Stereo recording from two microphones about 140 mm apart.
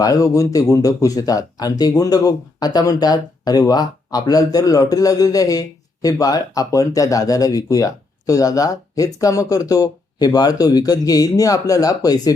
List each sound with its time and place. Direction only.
0.0 s speech: 25° left (ahead or behind)